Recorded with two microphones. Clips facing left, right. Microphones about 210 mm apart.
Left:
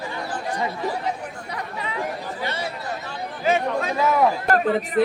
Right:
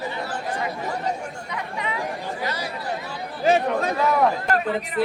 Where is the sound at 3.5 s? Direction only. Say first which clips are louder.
Right 2 dB; 35° right (ahead or behind).